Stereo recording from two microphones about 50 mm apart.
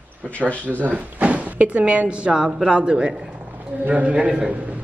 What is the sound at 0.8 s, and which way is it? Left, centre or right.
Speech, right.